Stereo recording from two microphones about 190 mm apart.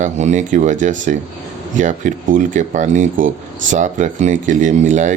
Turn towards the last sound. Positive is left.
turn(degrees=-40)  # may be behind; listen again after turning